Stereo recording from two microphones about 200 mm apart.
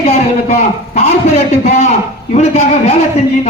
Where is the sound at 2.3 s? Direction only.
35° left (ahead or behind).